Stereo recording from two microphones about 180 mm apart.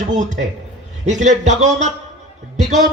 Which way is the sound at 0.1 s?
40° right (ahead or behind).